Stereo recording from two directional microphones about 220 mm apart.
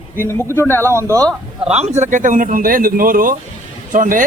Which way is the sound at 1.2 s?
5° right (ahead or behind).